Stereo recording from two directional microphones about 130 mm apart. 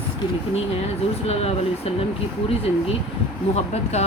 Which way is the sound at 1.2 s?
50° left (ahead or behind).